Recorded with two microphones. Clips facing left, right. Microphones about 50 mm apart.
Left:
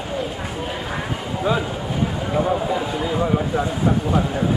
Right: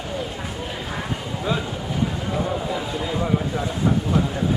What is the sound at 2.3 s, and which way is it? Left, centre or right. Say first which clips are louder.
Speech: left 4 dB; left.